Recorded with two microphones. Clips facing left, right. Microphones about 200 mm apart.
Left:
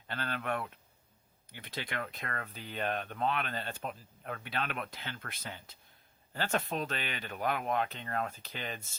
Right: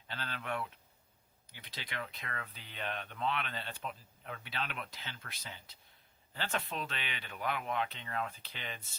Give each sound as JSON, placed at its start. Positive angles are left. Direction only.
{"t": 0.1, "sound": "speech", "side_deg": 55}